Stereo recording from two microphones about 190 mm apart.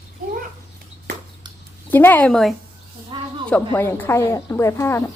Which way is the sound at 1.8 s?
10° left (ahead or behind).